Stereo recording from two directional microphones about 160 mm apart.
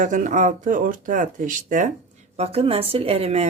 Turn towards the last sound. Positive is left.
turn(degrees=-40)  # may be behind; listen again after turning